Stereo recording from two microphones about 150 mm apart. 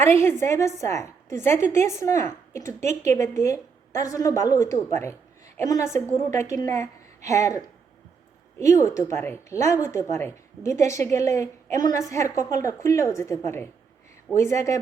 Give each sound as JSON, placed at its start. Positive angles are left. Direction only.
{"t": 0.0, "sound": "a woman's voice", "side_deg": 15}
{"t": 8.5, "sound": "a woman's voice", "side_deg": 20}